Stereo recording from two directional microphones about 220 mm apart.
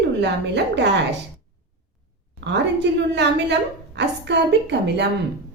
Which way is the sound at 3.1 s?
50° right (ahead or behind).